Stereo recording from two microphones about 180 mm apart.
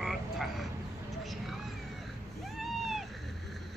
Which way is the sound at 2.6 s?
Centre (ahead or behind).